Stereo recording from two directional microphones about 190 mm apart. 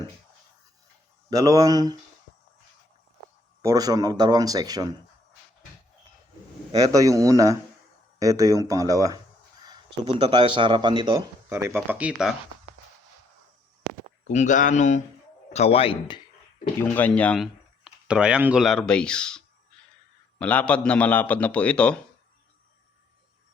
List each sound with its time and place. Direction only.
1.3 s speech: 20° right (ahead or behind)
3.6 s speech: 20° right (ahead or behind)
6.7 s speech: 20° right (ahead or behind)
9.6 s a sound: 25° right (ahead or behind)
10.2 s speech: 25° right (ahead or behind)
11.4 s speech: 15° right (ahead or behind)
14.3 s a man's voice: 40° left (ahead or behind)
16.8 s speech: 10° left (ahead or behind)
20.4 s a man's voice: 5° left (ahead or behind)